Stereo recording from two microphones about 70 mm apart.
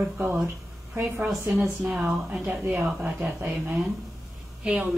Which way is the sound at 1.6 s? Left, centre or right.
Centre.